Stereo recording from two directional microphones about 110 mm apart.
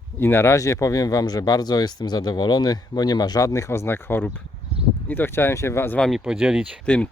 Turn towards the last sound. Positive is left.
turn(degrees=-10)  # may be behind; listen again after turning